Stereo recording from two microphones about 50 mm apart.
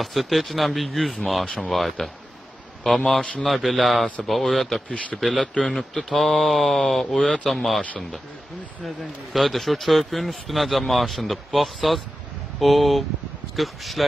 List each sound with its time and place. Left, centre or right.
0.0 s a man's voice: centre
7.2 s speech: centre
7.4 s speech: centre
8.8 s speech: centre